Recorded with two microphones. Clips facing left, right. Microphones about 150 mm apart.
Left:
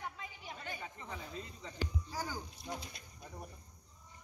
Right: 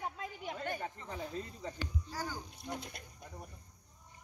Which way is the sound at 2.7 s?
60° right (ahead or behind).